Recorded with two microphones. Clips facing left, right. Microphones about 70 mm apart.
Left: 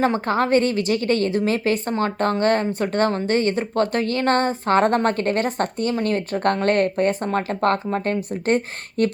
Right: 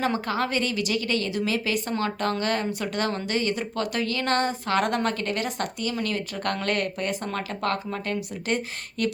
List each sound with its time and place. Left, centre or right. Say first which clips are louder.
0.0 s speech: left 6 dB; left